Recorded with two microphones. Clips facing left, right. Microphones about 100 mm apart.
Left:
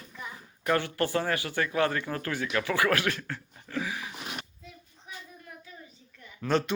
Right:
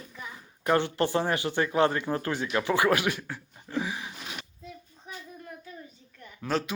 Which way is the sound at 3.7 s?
20° right (ahead or behind).